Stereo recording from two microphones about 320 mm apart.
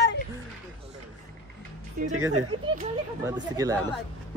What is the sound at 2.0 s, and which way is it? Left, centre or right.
Speech, right.